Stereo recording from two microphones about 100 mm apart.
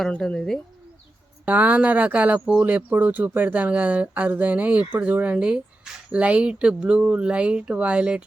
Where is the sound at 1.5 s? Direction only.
15° right (ahead or behind).